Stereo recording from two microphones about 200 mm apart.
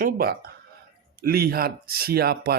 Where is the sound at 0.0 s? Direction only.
50° right (ahead or behind).